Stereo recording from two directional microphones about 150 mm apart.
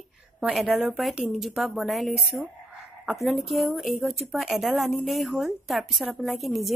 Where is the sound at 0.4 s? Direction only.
Centre (ahead or behind).